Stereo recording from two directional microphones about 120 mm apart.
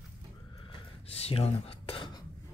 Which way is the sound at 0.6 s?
50° left (ahead or behind).